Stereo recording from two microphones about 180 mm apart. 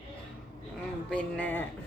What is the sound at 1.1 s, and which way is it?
Speech, 10° left (ahead or behind).